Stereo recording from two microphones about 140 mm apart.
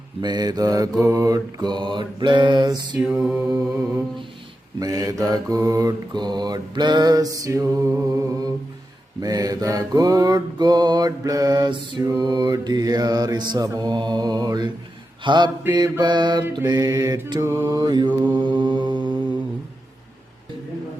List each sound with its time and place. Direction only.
0.2 s mantra: 30° right (ahead or behind)
3.1 s mantra: 10° right (ahead or behind)
3.5 s mantra: 20° right (ahead or behind)